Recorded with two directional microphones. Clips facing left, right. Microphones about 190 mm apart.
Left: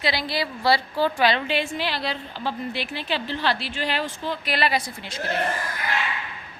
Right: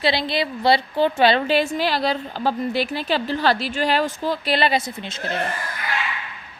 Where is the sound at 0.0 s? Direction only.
25° right (ahead or behind).